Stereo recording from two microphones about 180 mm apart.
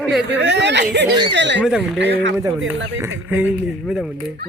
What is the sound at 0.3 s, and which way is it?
Speech, 80° right.